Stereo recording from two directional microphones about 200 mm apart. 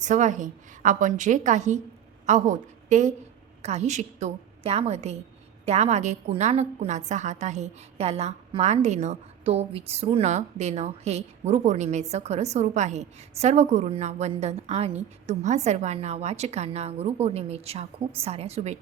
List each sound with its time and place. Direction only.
0.0 s a woman's voice: 35° right (ahead or behind)